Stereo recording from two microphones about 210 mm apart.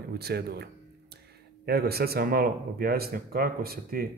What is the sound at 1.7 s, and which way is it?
A man's voice, 45° right (ahead or behind).